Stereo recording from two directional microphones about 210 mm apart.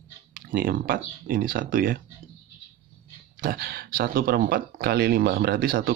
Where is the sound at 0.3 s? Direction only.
40° right (ahead or behind).